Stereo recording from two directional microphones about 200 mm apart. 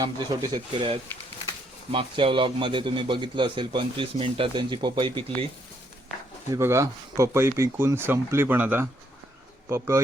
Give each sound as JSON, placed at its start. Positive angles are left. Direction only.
{"t": 0.0, "sound": "a man's voice", "side_deg": -20}
{"t": 6.5, "sound": "speech", "side_deg": -15}